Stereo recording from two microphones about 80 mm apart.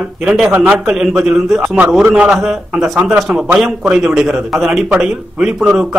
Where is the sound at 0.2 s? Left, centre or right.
Centre.